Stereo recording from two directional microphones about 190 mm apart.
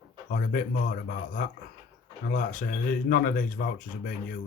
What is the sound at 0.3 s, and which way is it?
Speech, 45° left (ahead or behind).